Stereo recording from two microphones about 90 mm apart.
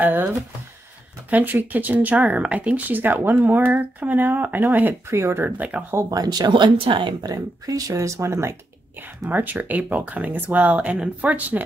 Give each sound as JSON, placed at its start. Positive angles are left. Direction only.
{"t": 0.0, "sound": "speech", "side_deg": -20}
{"t": 1.3, "sound": "speech", "side_deg": -20}
{"t": 5.9, "sound": "speech", "side_deg": -40}
{"t": 7.2, "sound": "speech", "side_deg": -40}
{"t": 9.2, "sound": "speech", "side_deg": -20}